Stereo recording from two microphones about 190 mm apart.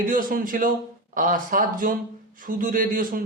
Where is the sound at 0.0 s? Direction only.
45° right (ahead or behind).